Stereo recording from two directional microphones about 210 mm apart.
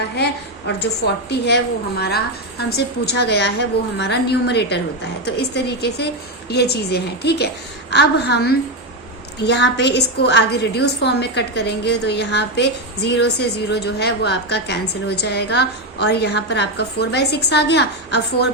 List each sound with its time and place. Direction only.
0.8 s a woman's voice: 55° left (ahead or behind)